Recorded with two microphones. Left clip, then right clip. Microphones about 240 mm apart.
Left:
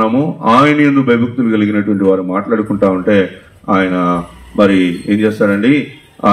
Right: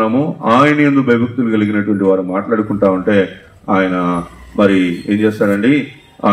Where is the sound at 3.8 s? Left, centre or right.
Left.